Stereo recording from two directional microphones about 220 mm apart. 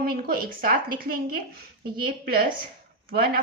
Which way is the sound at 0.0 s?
45° right (ahead or behind).